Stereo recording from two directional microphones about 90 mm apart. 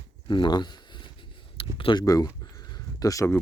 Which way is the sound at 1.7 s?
65° left (ahead or behind).